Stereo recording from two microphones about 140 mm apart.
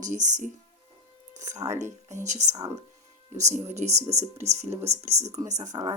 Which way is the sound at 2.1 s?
55° right (ahead or behind).